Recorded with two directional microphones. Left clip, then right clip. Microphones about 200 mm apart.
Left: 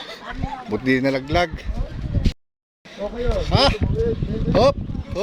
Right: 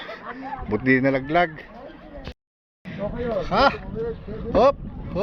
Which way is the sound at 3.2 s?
10° left (ahead or behind).